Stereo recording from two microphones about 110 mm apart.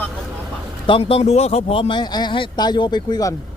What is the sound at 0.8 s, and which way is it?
Speech, 55° left (ahead or behind).